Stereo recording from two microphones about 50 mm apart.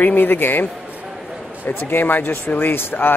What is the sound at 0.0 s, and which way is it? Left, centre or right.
Speech, left.